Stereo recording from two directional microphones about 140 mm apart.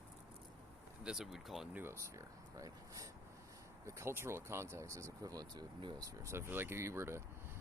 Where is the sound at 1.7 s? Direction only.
15° right (ahead or behind).